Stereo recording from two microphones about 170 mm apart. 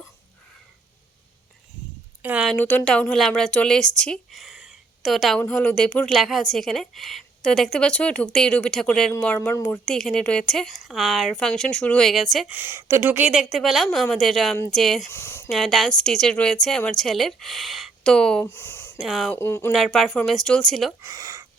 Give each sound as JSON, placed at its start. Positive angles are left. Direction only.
{"t": 2.2, "sound": "speech", "side_deg": -5}
{"t": 2.6, "sound": "speech", "side_deg": 10}
{"t": 12.5, "sound": "speech", "side_deg": -15}
{"t": 15.1, "sound": "speech", "side_deg": 15}
{"t": 15.4, "sound": "speech", "side_deg": 0}
{"t": 18.9, "sound": "speech", "side_deg": 0}
{"t": 19.3, "sound": "speech", "side_deg": 15}
{"t": 19.7, "sound": "speech", "side_deg": 0}
{"t": 21.0, "sound": "a sound", "side_deg": -20}